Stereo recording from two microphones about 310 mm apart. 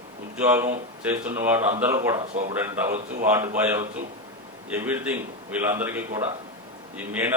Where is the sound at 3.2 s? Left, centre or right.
Centre.